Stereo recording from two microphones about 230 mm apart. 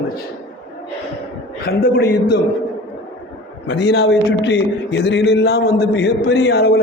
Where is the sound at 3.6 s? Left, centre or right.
Left.